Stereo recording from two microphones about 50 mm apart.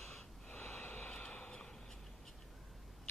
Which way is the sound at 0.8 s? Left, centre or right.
Left.